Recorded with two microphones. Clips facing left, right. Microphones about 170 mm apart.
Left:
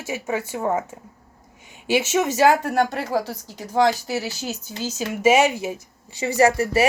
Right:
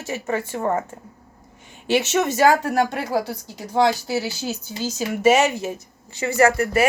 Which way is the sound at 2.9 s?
10° right (ahead or behind).